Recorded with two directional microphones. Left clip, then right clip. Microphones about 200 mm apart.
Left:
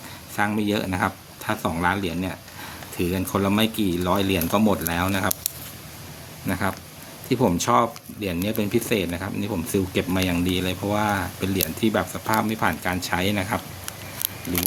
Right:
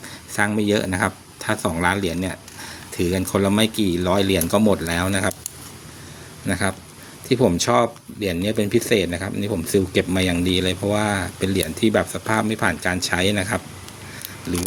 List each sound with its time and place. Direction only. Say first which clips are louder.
0.3 s speech: right 4 dB; 20° right (ahead or behind)
6.5 s speech: right 3 dB; 20° right (ahead or behind)